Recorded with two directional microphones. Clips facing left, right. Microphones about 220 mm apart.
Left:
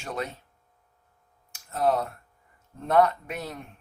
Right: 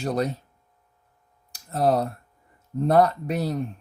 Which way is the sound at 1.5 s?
35° right (ahead or behind).